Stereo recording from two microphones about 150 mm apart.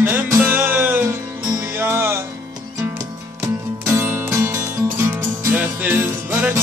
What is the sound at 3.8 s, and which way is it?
Music, 15° right (ahead or behind).